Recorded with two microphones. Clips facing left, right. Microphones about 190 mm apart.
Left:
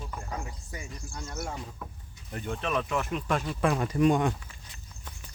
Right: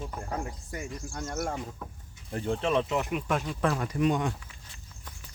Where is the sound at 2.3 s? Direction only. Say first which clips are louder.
Right 4 dB; 30° right (ahead or behind).